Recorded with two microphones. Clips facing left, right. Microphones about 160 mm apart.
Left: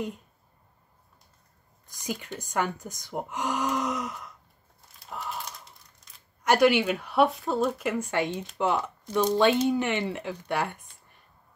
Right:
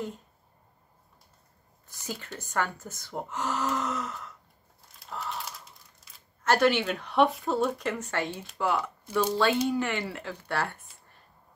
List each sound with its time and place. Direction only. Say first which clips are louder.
1.9 s speech: left 4 dB; 15° left (ahead or behind)
5.1 s a sound: even; 15° left (ahead or behind)
6.4 s speech: left 3 dB; 15° left (ahead or behind)